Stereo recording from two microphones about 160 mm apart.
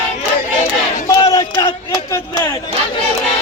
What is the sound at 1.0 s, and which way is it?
Speech, 20° left (ahead or behind).